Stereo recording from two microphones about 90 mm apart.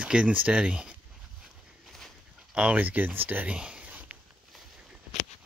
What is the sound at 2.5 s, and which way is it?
Speech, 15° right (ahead or behind).